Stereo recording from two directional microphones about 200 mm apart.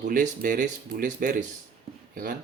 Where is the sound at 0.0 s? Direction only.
40° right (ahead or behind).